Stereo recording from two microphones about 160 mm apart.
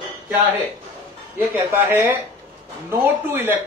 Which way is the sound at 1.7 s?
15° right (ahead or behind).